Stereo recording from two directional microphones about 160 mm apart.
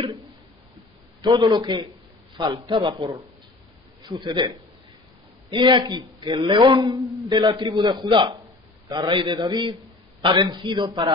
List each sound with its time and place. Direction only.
1.2 s a man's voice: 25° right (ahead or behind)
5.5 s a man's voice: 30° right (ahead or behind)